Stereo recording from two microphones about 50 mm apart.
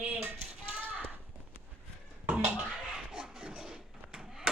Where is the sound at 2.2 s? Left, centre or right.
Right.